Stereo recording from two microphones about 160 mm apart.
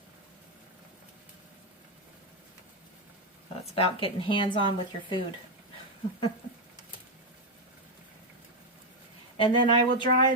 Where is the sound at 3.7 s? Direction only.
35° left (ahead or behind).